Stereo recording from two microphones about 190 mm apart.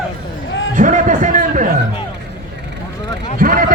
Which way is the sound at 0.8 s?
45° right (ahead or behind).